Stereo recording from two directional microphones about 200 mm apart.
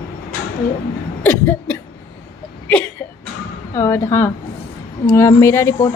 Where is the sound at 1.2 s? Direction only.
10° left (ahead or behind).